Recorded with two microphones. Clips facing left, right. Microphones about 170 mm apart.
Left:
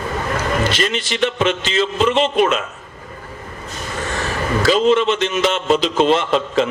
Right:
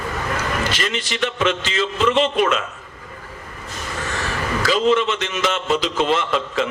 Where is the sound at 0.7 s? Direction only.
30° left (ahead or behind).